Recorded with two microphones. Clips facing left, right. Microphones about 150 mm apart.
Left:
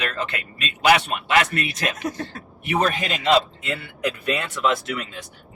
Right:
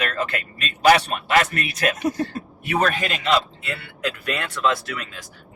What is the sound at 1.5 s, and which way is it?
Speech, 30° left (ahead or behind).